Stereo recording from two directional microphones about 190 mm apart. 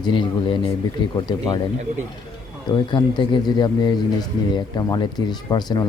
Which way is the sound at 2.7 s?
25° left (ahead or behind).